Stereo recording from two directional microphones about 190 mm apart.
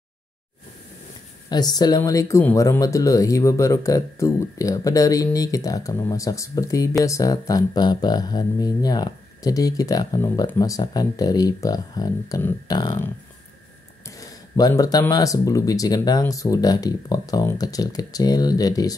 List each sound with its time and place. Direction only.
1.5 s speech: 20° left (ahead or behind)
14.0 s speech: 20° left (ahead or behind)